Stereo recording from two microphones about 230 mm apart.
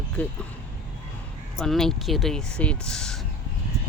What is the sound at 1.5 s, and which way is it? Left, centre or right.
Speech, centre.